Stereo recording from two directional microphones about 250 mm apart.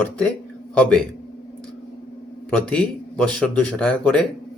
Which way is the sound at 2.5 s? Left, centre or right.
Centre.